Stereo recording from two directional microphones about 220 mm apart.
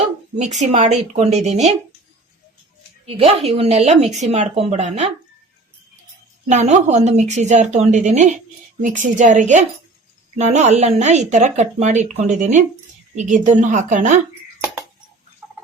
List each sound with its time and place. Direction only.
0.6 s speech: 30° right (ahead or behind)
3.1 s speech: 30° right (ahead or behind)
6.5 s speech: 30° right (ahead or behind)